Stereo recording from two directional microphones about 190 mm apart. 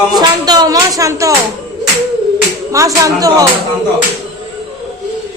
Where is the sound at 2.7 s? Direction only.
15° right (ahead or behind).